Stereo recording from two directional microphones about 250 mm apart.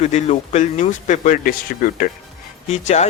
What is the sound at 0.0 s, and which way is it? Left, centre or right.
A man's voice, left.